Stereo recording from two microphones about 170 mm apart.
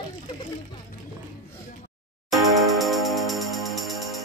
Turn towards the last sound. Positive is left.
turn(degrees=0)  # may be behind; listen again after turning